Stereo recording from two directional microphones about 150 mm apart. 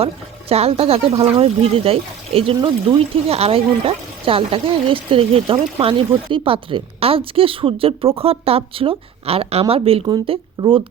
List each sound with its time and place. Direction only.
0.0 s speech: 40° right (ahead or behind)